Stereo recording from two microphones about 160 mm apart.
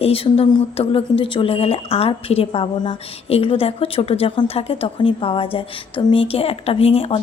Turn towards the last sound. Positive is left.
turn(degrees=35)  # may be behind; listen again after turning